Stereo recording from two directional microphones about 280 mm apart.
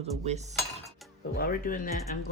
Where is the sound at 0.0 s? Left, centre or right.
Right.